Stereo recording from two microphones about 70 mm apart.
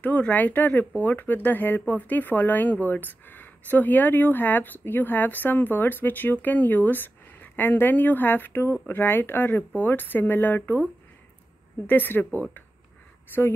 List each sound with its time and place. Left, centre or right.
0.0 s speech: left